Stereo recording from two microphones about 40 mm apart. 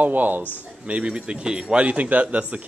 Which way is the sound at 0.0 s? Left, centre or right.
Right.